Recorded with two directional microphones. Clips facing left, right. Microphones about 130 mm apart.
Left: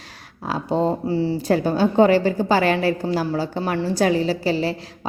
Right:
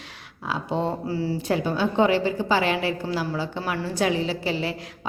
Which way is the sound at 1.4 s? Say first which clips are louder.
Left 5 dB; 40° left (ahead or behind).